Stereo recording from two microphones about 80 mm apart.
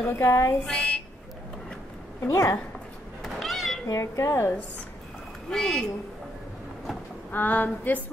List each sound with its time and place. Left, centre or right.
0.0 s speech: left
0.7 s a woman's voice: centre
2.3 s speech: left
3.2 s a sound: centre
3.8 s speech: left
5.5 s a woman's voice: centre
7.2 s speech: left